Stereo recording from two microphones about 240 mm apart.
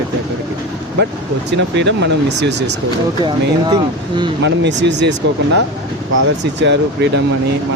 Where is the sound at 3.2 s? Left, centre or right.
Centre.